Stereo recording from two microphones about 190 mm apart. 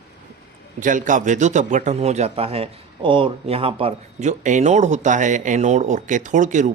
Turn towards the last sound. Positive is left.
turn(degrees=-40)  # may be behind; listen again after turning